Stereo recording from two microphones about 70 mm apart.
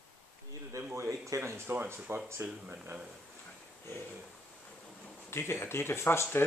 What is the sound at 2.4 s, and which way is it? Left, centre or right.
Speech, centre.